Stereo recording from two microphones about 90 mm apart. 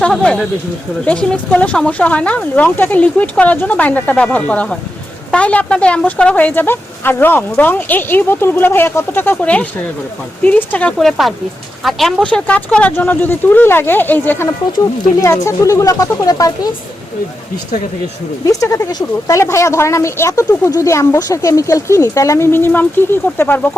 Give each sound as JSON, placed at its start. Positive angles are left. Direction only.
{"t": 0.0, "sound": "speech", "side_deg": 15}
{"t": 10.9, "sound": "speech", "side_deg": 0}
{"t": 12.2, "sound": "speech", "side_deg": 15}
{"t": 14.4, "sound": "speech", "side_deg": 35}
{"t": 18.4, "sound": "speech", "side_deg": 40}
{"t": 19.4, "sound": "speech", "side_deg": 30}
{"t": 22.5, "sound": "speech", "side_deg": 20}